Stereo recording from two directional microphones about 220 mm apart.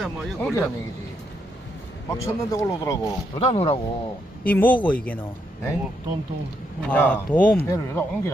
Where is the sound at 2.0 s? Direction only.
15° left (ahead or behind).